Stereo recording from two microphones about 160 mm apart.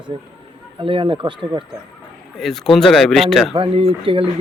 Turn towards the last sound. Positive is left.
turn(degrees=-35)  # may be behind; listen again after turning